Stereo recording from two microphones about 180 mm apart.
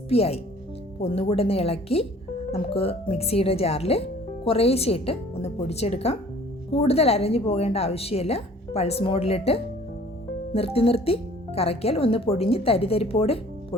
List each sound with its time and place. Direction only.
0.1 s speech: 35° left (ahead or behind)